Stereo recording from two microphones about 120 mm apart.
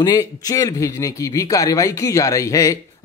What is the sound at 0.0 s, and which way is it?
Speech, 30° left (ahead or behind).